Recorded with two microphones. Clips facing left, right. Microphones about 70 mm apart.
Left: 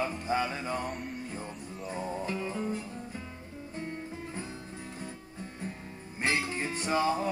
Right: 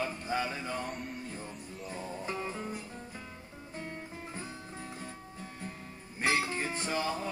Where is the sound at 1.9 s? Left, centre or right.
Left.